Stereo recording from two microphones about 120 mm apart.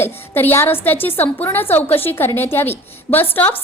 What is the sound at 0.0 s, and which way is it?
A woman's voice, 20° left (ahead or behind).